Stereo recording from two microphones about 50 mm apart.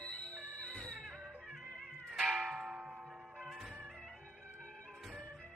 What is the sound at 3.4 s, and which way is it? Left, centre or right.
Music, centre.